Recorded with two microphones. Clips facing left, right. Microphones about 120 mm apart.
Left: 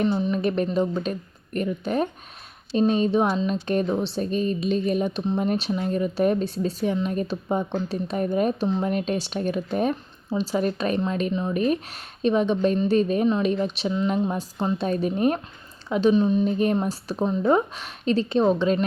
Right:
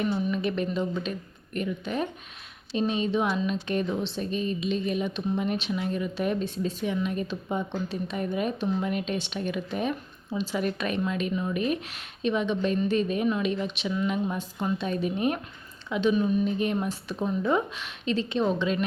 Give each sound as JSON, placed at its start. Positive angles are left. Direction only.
{"t": 0.0, "sound": "a woman's voice", "side_deg": 30}
{"t": 11.5, "sound": "a woman's voice", "side_deg": 40}
{"t": 16.1, "sound": "a woman's voice", "side_deg": 25}